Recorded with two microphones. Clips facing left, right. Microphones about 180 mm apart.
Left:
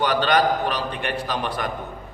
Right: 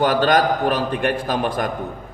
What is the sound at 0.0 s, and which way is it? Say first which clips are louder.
A man's voice: right 3 dB; 45° right (ahead or behind).